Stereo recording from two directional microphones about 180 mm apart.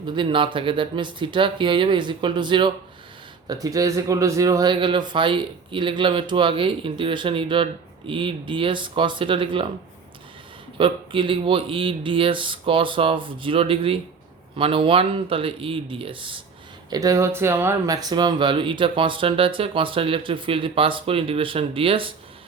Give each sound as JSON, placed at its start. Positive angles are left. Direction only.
{"t": 0.2, "sound": "a man's voice", "side_deg": -30}
{"t": 10.8, "sound": "a man's voice", "side_deg": -30}